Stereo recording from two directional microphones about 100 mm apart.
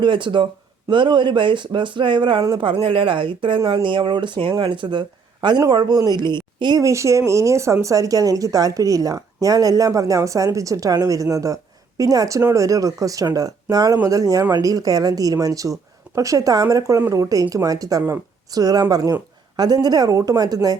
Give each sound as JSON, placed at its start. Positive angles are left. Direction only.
{"t": 0.0, "sound": "speech", "side_deg": -55}
{"t": 6.8, "sound": "speech", "side_deg": -30}